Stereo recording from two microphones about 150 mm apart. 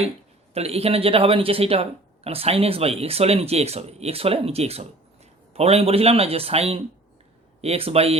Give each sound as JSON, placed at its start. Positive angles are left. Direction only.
{"t": 0.5, "sound": "speech", "side_deg": -45}